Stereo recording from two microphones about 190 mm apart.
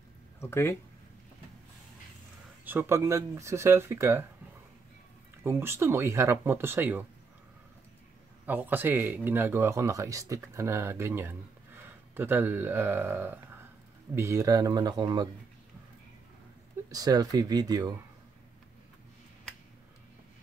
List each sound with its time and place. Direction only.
0.4 s speech: 15° left (ahead or behind)
2.6 s speech: 10° right (ahead or behind)
5.4 s speech: 10° right (ahead or behind)
8.5 s speech: 10° right (ahead or behind)
16.9 s speech: 20° right (ahead or behind)